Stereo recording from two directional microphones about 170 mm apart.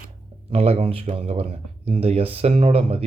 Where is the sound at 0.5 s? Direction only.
35° right (ahead or behind).